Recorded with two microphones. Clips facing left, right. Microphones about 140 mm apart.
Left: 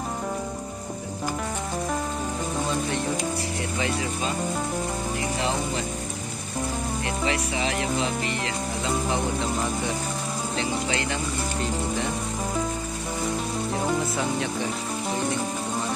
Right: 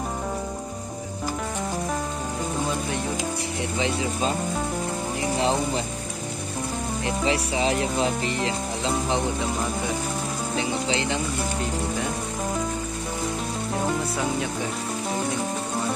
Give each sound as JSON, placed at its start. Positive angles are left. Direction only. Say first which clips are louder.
{"t": 7.1, "sound": "speech", "louder": "right 4 dB", "side_deg": -30}
{"t": 10.5, "sound": "speech", "louder": "right 2 dB", "side_deg": -15}